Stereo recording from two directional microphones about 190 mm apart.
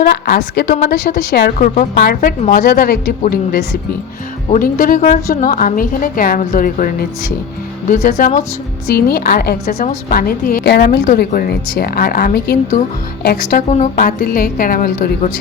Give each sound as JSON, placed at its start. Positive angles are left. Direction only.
{"t": 0.0, "sound": "a woman's voice", "side_deg": 50}
{"t": 1.5, "sound": "a woman's voice", "side_deg": 40}
{"t": 8.9, "sound": "a woman's voice", "side_deg": 55}
{"t": 13.7, "sound": "a woman's voice", "side_deg": 35}